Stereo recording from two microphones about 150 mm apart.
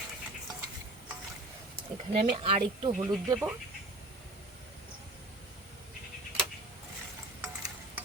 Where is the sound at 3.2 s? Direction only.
15° right (ahead or behind).